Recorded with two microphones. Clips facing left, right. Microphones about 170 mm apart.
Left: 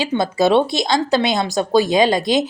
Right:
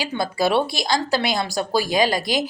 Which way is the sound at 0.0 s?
20° left (ahead or behind).